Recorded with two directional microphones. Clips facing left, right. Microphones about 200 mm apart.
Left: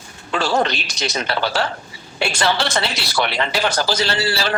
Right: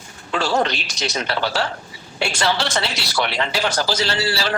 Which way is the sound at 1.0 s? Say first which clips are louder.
Left 1 dB; 60° left (ahead or behind).